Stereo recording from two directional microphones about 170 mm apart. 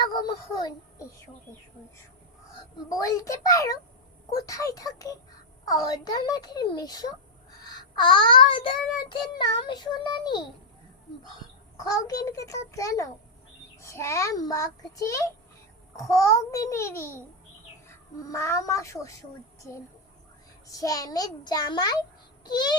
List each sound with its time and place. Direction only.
0.1 s a child's voice: 25° left (ahead or behind)
2.7 s child singing: 20° left (ahead or behind)
11.8 s child singing: 20° left (ahead or behind)
16.0 s a child's voice: 20° left (ahead or behind)
20.7 s child singing: 20° left (ahead or behind)